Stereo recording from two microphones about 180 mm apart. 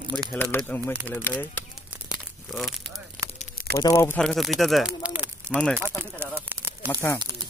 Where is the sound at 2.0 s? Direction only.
Centre (ahead or behind).